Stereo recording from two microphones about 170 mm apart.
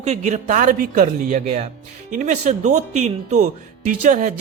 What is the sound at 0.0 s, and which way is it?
Speech, 40° right (ahead or behind).